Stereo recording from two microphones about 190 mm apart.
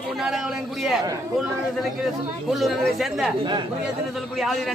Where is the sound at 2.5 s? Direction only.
Centre (ahead or behind).